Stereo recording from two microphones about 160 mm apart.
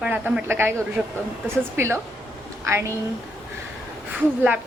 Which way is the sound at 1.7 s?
15° right (ahead or behind).